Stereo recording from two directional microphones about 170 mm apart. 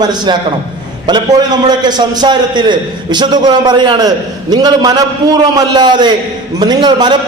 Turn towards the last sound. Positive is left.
turn(degrees=-25)  # may be behind; listen again after turning